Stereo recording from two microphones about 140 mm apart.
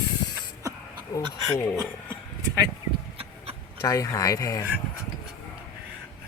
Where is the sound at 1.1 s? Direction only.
25° left (ahead or behind).